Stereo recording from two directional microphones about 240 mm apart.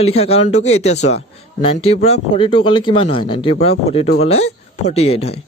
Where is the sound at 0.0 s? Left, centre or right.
Left.